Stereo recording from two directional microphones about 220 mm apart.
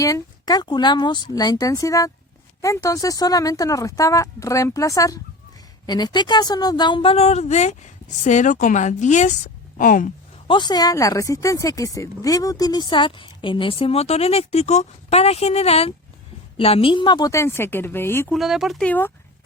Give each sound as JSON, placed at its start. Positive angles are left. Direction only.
{"t": 0.0, "sound": "a woman's voice", "side_deg": 15}
{"t": 10.4, "sound": "speech", "side_deg": 20}
{"t": 18.3, "sound": "speech", "side_deg": 0}